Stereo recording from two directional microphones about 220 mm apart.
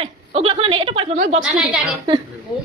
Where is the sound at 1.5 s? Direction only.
5° right (ahead or behind).